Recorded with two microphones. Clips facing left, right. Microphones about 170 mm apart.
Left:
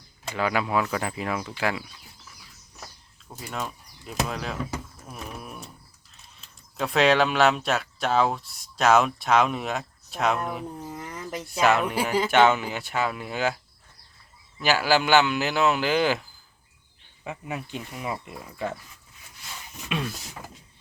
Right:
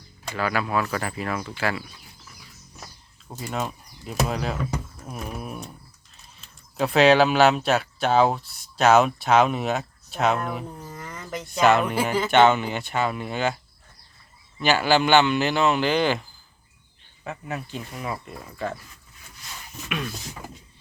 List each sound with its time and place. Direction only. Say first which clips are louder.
0.3 s speech: even; 20° left (ahead or behind)
3.5 s speech: right 4 dB; 5° right (ahead or behind)
14.6 s speech: right 2 dB; 5° left (ahead or behind)
17.2 s speech: right 1 dB; 15° left (ahead or behind)